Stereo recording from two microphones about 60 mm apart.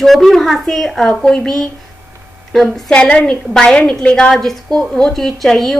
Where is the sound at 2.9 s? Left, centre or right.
Centre.